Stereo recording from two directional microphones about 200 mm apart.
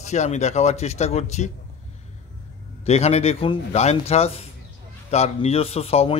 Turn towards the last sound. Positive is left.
turn(degrees=30)  # may be behind; listen again after turning